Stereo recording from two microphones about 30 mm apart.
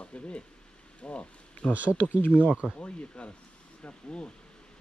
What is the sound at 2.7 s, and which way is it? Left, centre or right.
Speech, left.